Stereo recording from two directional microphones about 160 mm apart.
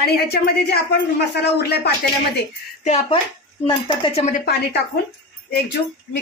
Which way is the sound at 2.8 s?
45° left (ahead or behind).